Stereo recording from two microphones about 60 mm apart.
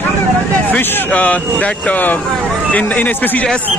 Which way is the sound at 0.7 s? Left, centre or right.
Left.